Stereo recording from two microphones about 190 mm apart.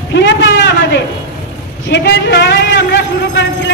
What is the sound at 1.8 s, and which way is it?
A man's voice, 60° left (ahead or behind).